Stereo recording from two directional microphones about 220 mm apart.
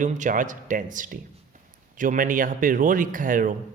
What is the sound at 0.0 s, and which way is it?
Speech, 35° right (ahead or behind).